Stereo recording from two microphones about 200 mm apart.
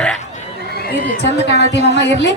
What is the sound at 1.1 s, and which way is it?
A man's voice, 55° left (ahead or behind).